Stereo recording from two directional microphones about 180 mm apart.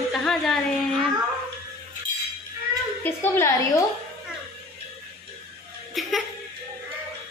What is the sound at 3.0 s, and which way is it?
Speech, 15° left (ahead or behind).